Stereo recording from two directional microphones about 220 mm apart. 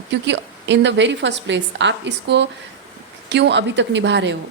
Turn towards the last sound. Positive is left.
turn(degrees=-55)  # may be behind; listen again after turning